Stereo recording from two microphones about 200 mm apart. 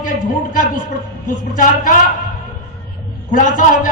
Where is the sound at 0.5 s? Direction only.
45° left (ahead or behind).